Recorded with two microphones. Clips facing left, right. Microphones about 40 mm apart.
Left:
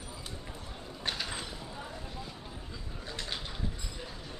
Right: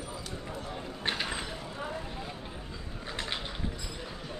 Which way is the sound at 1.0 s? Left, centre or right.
Right.